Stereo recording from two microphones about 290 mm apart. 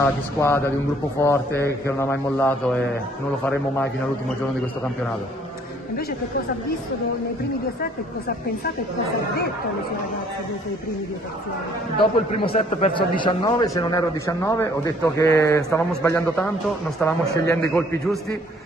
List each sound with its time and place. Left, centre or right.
0.0 s a man's voice: centre
12.0 s a man's voice: left; by 18.2 s centre